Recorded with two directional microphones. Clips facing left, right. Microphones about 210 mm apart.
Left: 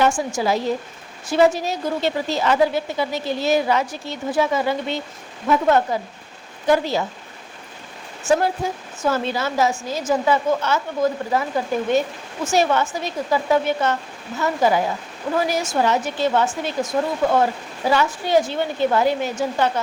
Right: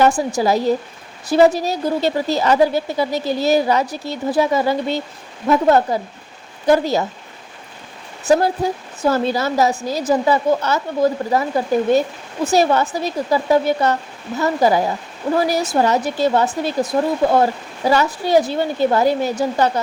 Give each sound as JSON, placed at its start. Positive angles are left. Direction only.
{"t": 0.0, "sound": "a woman's voice", "side_deg": -35}
{"t": 8.3, "sound": "a woman's voice", "side_deg": -35}
{"t": 12.5, "sound": "a woman's voice", "side_deg": -35}